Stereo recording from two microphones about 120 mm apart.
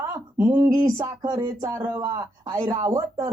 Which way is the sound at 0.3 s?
30° right (ahead or behind).